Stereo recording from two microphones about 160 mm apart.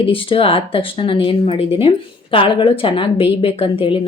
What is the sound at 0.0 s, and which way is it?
Speech, 35° left (ahead or behind).